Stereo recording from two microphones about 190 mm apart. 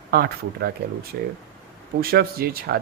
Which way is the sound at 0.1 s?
55° right (ahead or behind).